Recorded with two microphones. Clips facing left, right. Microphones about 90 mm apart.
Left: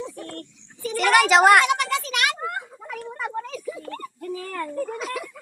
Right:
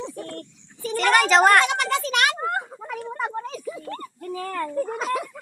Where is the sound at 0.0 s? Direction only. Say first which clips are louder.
Right 1 dB; 30° right (ahead or behind).